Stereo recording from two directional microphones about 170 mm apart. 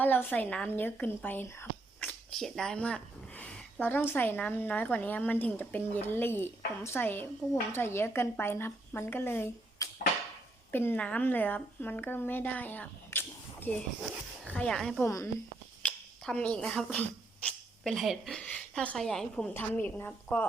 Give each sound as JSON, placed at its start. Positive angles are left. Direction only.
{"t": 0.0, "sound": "a woman's voice", "side_deg": 10}
{"t": 15.0, "sound": "speech", "side_deg": 20}
{"t": 15.8, "sound": "speech", "side_deg": 5}